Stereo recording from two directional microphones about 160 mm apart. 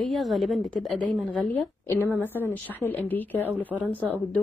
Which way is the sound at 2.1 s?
10° right (ahead or behind).